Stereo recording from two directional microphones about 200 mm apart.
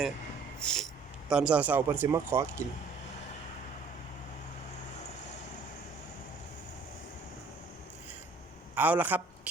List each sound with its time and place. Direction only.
0.6 s a sound: centre (ahead or behind)
1.3 s speech: 5° right (ahead or behind)
8.7 s a man's voice: 10° right (ahead or behind)